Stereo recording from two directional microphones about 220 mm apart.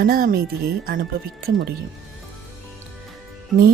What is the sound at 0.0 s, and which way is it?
Speech, 40° right (ahead or behind).